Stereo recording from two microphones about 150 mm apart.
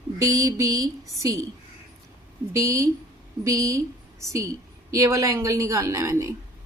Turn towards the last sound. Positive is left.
turn(degrees=-20)  # may be behind; listen again after turning